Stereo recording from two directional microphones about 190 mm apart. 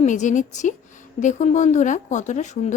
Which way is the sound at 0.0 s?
40° left (ahead or behind).